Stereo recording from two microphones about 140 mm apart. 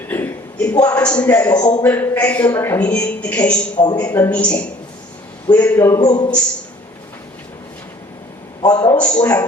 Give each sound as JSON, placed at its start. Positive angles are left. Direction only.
{"t": 0.1, "sound": "a man's voice", "side_deg": 15}
{"t": 8.6, "sound": "a sound", "side_deg": 25}
{"t": 9.0, "sound": "a woman's voice", "side_deg": 10}